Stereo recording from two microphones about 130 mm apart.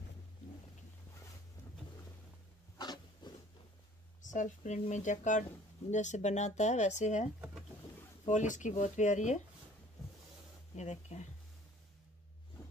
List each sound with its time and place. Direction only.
2.8 s a sound: 35° left (ahead or behind)
4.2 s speech: 75° left (ahead or behind)
8.3 s speech: 70° left (ahead or behind)
10.8 s speech: 60° left (ahead or behind)